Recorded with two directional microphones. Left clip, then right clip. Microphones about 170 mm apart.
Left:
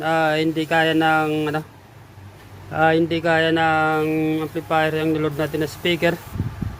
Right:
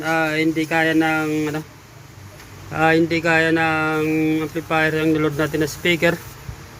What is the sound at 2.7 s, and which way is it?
Speech, 10° left (ahead or behind).